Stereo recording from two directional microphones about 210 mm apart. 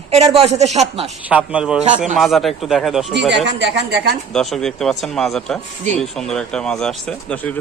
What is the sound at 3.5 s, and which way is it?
Speech, 55° right (ahead or behind).